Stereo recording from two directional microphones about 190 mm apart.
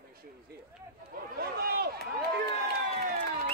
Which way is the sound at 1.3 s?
55° right (ahead or behind).